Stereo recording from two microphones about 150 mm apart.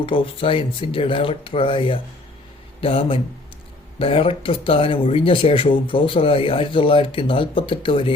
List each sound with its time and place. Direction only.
0.0 s speech: 35° left (ahead or behind)